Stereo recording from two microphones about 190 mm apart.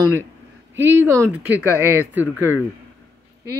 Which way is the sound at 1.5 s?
15° left (ahead or behind).